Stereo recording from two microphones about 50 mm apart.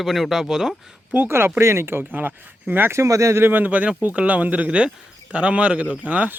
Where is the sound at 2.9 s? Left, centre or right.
Right.